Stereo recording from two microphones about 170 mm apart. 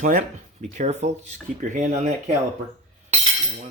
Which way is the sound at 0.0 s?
50° right (ahead or behind).